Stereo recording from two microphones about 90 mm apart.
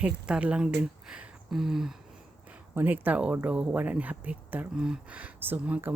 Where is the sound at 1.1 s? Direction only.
5° right (ahead or behind).